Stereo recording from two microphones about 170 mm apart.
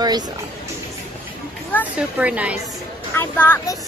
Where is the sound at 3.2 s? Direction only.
10° left (ahead or behind).